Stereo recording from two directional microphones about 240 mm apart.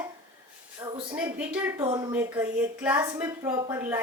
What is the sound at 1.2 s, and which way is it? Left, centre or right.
A woman's voice, centre.